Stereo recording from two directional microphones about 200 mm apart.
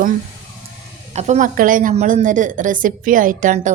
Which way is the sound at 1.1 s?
35° right (ahead or behind).